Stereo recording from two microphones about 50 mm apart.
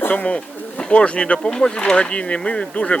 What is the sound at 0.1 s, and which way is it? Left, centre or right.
Speech, left.